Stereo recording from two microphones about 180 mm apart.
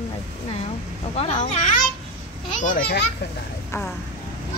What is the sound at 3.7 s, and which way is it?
Speech, 15° left (ahead or behind).